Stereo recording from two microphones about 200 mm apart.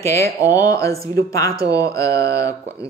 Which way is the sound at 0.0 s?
15° left (ahead or behind).